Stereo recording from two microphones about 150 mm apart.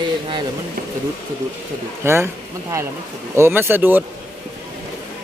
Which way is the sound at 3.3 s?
15° right (ahead or behind).